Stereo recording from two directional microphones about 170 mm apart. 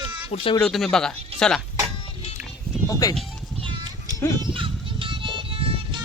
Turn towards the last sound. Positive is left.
turn(degrees=-30)  # may be behind; listen again after turning